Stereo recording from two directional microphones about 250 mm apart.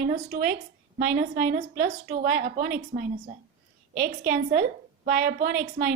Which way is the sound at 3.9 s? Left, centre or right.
Right.